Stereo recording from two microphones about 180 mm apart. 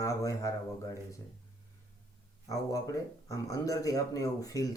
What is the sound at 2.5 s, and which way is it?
Speech, 20° left (ahead or behind).